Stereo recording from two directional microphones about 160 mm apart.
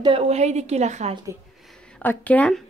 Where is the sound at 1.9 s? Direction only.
10° left (ahead or behind).